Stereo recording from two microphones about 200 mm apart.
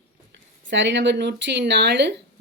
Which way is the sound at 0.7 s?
65° right (ahead or behind).